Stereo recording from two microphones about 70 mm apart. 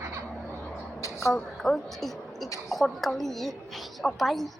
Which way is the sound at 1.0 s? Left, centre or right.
Left.